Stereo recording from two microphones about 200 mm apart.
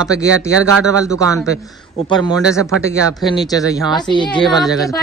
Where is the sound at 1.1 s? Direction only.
15° left (ahead or behind).